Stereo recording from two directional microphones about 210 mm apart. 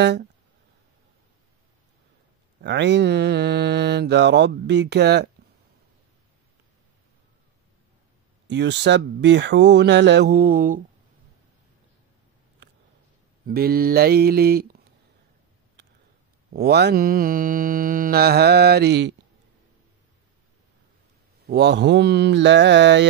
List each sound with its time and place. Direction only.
0.0 s mantra: 55° right (ahead or behind)
2.6 s mantra: 55° right (ahead or behind)
8.5 s speech: 55° right (ahead or behind)
13.5 s mantra: 45° right (ahead or behind)
16.5 s mantra: 50° right (ahead or behind)
21.5 s speech: 50° right (ahead or behind)